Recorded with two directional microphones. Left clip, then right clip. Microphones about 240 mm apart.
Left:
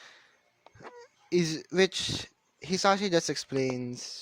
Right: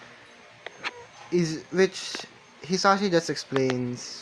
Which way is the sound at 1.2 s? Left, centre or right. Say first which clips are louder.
Right 2 dB; left.